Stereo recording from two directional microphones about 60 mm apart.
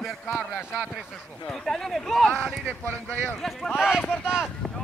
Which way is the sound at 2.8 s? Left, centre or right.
Left.